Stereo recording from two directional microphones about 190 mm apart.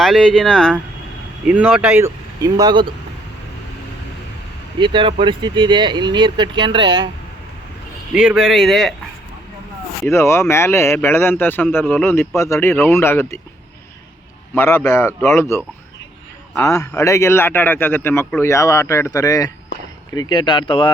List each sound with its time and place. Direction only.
0.0 s speech: centre (ahead or behind)
1.5 s speech: 5° right (ahead or behind)
4.8 s speech: 25° right (ahead or behind)
8.1 s speech: 5° right (ahead or behind)
10.1 s a man's voice: 15° left (ahead or behind)
14.5 s a man's voice: 10° left (ahead or behind); by 20.9 s 25° left (ahead or behind)